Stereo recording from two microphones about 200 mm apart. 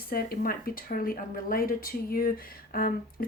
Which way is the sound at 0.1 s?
45° left (ahead or behind).